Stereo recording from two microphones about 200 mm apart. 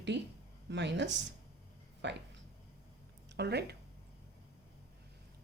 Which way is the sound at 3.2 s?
55° right (ahead or behind).